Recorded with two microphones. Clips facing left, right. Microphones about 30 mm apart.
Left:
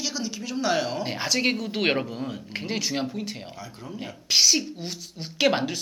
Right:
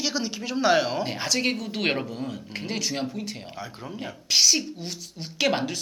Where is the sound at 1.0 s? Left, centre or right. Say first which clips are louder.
Left 1 dB; centre.